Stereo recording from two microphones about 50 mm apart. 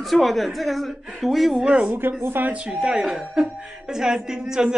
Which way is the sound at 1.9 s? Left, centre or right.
Right.